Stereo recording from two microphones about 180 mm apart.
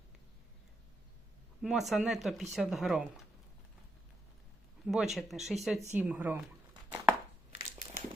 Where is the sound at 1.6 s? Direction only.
Centre (ahead or behind).